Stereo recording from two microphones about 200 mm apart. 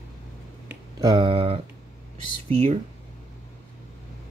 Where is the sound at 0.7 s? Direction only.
20° right (ahead or behind).